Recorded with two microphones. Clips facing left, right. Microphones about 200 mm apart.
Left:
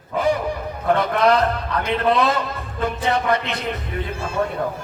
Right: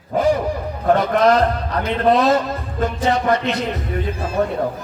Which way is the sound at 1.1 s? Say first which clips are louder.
Right 2 dB; 40° right (ahead or behind).